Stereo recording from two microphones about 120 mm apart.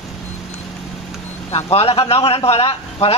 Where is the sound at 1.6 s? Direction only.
55° left (ahead or behind).